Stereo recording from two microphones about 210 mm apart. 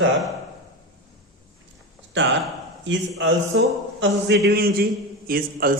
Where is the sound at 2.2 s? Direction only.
60° right (ahead or behind); by 5.8 s 45° right (ahead or behind).